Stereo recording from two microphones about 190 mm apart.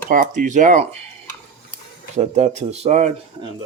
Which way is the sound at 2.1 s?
35° right (ahead or behind).